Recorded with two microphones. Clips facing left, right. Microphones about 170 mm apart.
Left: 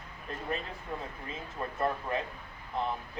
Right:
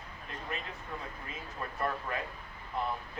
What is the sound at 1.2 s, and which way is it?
Speech, 25° left (ahead or behind).